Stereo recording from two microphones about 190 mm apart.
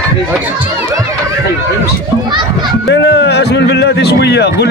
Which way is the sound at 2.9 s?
65° left (ahead or behind).